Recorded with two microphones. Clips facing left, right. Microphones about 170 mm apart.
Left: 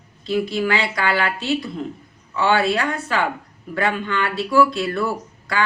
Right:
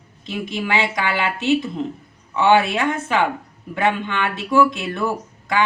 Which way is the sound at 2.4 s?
20° right (ahead or behind).